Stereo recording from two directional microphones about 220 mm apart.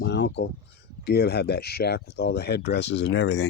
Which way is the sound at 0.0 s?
50° left (ahead or behind).